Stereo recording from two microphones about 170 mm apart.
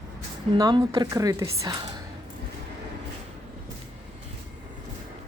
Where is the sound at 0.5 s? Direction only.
20° right (ahead or behind).